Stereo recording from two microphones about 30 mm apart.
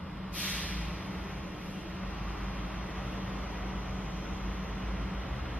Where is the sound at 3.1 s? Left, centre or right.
Right.